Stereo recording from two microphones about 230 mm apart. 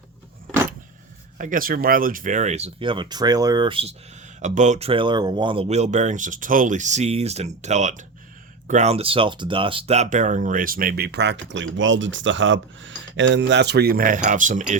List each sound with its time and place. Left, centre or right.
1.4 s speech: right